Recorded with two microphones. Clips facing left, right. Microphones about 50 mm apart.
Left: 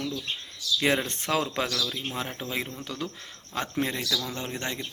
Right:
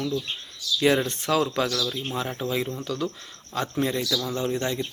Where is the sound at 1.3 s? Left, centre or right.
Left.